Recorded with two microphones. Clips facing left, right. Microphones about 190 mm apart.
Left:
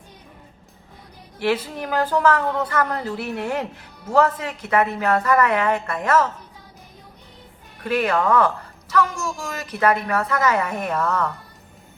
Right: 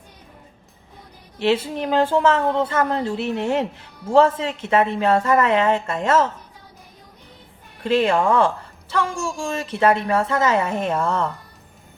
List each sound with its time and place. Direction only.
1.4 s speech: 25° right (ahead or behind)
7.9 s speech: 25° right (ahead or behind)